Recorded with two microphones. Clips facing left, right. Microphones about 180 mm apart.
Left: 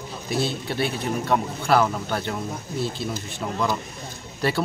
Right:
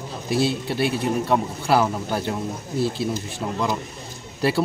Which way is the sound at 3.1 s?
20° right (ahead or behind).